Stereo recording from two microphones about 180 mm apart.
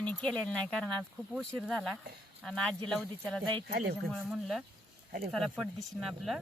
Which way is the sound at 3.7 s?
55° right (ahead or behind).